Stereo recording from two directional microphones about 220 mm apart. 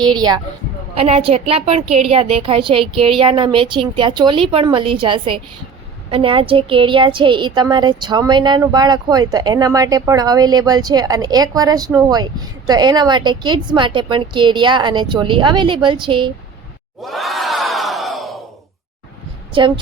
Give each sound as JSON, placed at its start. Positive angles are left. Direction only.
{"t": 0.0, "sound": "a woman's voice", "side_deg": -20}
{"t": 17.0, "sound": "crowd", "side_deg": 0}
{"t": 19.5, "sound": "a woman's voice", "side_deg": -20}